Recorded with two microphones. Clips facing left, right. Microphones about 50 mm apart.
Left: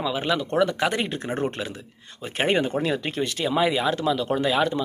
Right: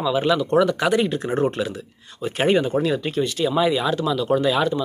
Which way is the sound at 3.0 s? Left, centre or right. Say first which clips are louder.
Right 4 dB; left.